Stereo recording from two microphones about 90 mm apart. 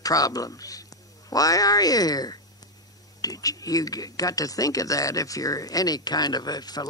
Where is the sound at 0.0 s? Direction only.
45° left (ahead or behind).